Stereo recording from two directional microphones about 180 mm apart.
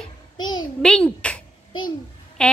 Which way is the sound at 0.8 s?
5° left (ahead or behind).